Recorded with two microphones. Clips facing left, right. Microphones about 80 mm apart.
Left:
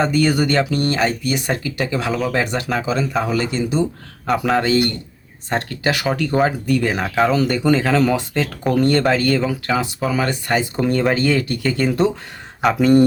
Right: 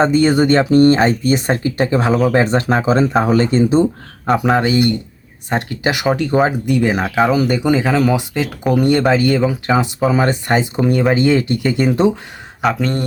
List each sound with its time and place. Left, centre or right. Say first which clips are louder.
0.0 s speech: right 4 dB; right
4.4 s speech: right 2 dB; centre
10.8 s speech: right 3 dB; centre
12.6 s speech: right 1 dB; centre